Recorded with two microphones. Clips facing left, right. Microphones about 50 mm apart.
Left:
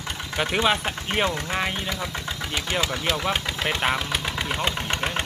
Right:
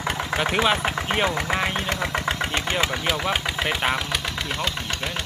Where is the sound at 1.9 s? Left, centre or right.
Right.